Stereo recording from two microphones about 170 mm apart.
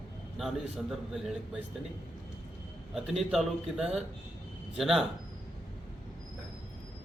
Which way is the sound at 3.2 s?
Centre (ahead or behind).